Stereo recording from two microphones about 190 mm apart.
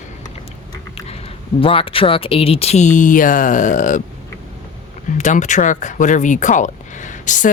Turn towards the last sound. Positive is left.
turn(degrees=40)  # may be behind; listen again after turning